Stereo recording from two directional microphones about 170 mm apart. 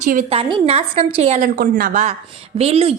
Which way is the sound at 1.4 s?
65° right (ahead or behind).